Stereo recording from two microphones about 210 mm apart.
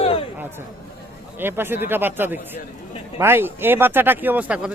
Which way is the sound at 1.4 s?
10° right (ahead or behind).